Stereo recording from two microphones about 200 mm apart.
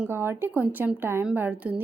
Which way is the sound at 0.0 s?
10° right (ahead or behind).